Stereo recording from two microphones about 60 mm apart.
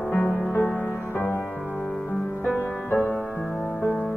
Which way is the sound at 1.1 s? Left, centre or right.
Left.